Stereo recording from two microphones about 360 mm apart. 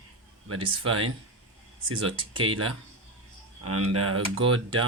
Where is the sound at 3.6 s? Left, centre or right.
Right.